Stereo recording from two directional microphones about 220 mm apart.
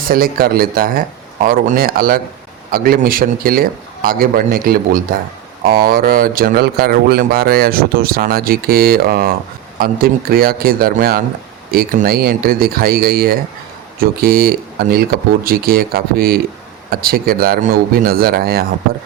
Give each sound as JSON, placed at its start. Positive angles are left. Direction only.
{"t": 0.0, "sound": "speech", "side_deg": -40}